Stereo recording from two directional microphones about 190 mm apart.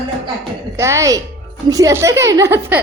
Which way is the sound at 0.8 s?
15° right (ahead or behind).